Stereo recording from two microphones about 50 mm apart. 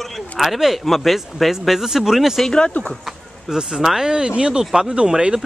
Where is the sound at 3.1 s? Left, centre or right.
Centre.